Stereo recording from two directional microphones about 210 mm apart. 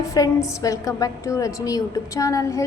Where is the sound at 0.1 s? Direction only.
15° left (ahead or behind).